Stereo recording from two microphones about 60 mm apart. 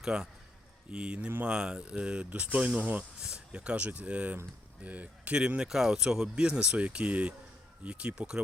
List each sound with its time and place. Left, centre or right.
0.0 s a man's voice: centre; by 3.0 s right
3.2 s speech: centre
5.6 s speech: centre